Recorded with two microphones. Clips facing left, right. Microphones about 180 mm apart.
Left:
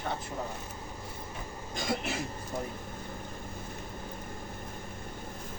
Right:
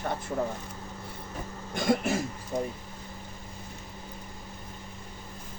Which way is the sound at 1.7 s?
50° right (ahead or behind).